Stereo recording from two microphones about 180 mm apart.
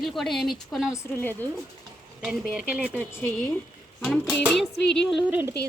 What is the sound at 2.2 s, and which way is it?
Speech, 5° right (ahead or behind).